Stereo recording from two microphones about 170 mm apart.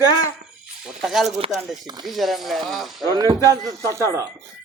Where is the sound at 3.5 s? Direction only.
15° right (ahead or behind).